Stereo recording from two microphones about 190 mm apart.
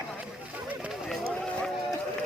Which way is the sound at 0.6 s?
5° right (ahead or behind).